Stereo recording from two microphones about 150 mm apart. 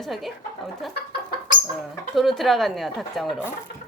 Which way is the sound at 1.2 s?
90° left.